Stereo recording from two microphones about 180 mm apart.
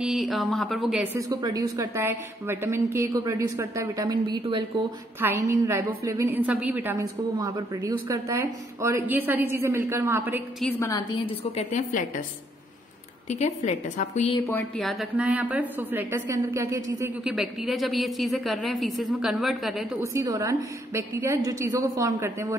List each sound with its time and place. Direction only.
0.0 s speech: centre (ahead or behind)
1.1 s a woman's voice: 20° right (ahead or behind)
10.8 s a woman's voice: 20° left (ahead or behind)
11.5 s a woman's voice: 45° left (ahead or behind)
13.3 s a woman's voice: 40° left (ahead or behind)
14.5 s a woman's voice: centre (ahead or behind); by 17.1 s 15° right (ahead or behind)
17.2 s a woman's voice: 5° right (ahead or behind)
20.0 s a woman's voice: 15° right (ahead or behind)